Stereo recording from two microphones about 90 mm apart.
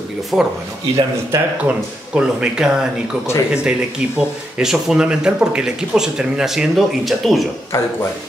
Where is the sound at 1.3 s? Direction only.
30° right (ahead or behind).